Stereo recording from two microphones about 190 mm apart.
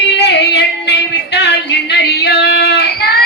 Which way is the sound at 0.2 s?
60° left (ahead or behind).